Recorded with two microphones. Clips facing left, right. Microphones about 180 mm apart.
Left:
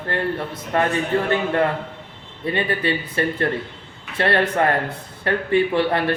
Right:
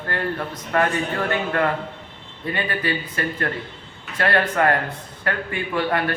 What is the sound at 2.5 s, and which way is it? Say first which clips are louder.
A man's voice: left 3 dB; 25° left (ahead or behind).